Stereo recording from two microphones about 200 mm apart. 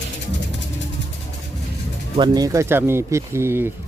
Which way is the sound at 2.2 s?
20° right (ahead or behind).